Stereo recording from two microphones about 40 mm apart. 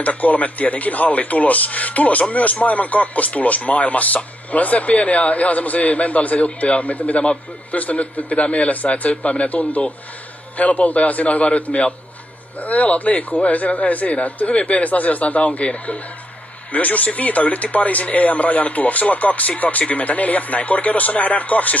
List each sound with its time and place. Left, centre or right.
0.0 s speech: left